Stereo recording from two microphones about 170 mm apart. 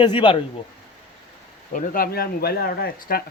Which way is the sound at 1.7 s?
55° left (ahead or behind).